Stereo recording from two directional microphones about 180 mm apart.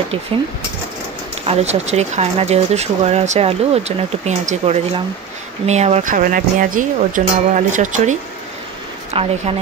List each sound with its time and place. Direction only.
1.4 s speech: 35° right (ahead or behind)